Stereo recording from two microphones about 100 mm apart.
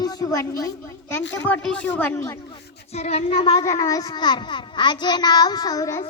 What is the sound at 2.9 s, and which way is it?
Child singing, 90° left.